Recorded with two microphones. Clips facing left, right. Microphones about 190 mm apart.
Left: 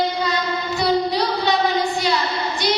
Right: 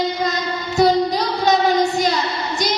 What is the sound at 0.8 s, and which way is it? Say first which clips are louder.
Music: right 4 dB; 45° right (ahead or behind).